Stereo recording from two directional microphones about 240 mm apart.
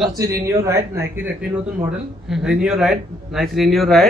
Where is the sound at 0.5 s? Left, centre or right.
Centre.